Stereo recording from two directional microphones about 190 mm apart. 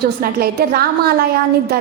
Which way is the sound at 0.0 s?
55° right (ahead or behind).